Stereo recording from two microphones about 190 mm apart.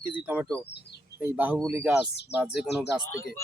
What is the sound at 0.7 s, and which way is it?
Speech, 60° left (ahead or behind).